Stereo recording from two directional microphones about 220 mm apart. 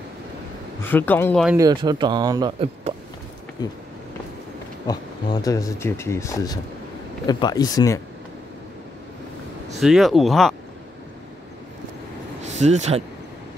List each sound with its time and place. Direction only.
0.8 s speech: 10° left (ahead or behind)
1.6 s a man's voice: 20° right (ahead or behind)
3.6 s speech: 15° left (ahead or behind)
4.8 s speech: 15° left (ahead or behind)
9.8 s speech: centre (ahead or behind)
12.4 s speech: 30° right (ahead or behind)